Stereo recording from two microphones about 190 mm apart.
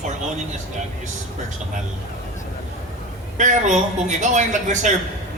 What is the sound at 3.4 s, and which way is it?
Speech, 40° right (ahead or behind).